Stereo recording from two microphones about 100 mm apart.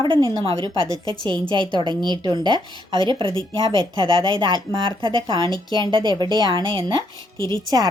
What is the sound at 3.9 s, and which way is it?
A woman's voice, 50° right (ahead or behind).